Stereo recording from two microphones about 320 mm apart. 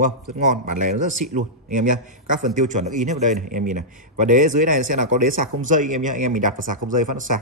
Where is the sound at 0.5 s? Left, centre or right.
Right.